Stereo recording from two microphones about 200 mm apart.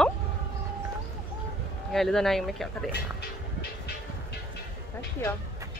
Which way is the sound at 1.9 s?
Centre (ahead or behind).